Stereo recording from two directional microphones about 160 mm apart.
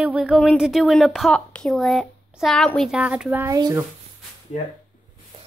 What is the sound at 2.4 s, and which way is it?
Child singing, 5° left (ahead or behind).